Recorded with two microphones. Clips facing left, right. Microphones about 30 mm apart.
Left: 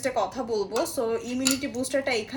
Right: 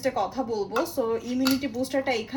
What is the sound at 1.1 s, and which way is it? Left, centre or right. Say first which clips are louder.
Dishes: right 2 dB; left.